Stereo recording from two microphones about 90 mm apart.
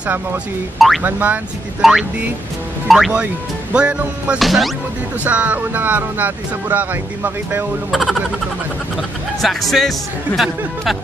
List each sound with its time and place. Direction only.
0.0 s speech: 20° right (ahead or behind)
0.7 s speech: centre (ahead or behind)
1.0 s music: 20° right (ahead or behind)
1.8 s speech: 5° right (ahead or behind)
3.7 s music: 10° right (ahead or behind)
4.4 s speech: centre (ahead or behind)
5.2 s speech: 15° right (ahead or behind)
7.9 s speech: centre (ahead or behind)